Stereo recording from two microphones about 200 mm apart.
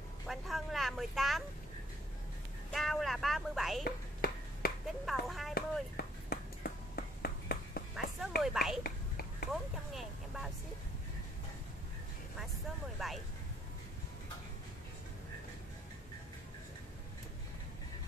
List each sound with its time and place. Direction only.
0.3 s vehicle: centre (ahead or behind)
2.7 s speech: centre (ahead or behind)
3.8 s finger snapping: 50° left (ahead or behind)
4.8 s speech: centre (ahead or behind)
5.5 s a sound: 50° left (ahead or behind)
7.9 s speech: centre (ahead or behind)
8.8 s whispering: 50° left (ahead or behind)
9.5 s speech: centre (ahead or behind)
13.0 s speech: centre (ahead or behind)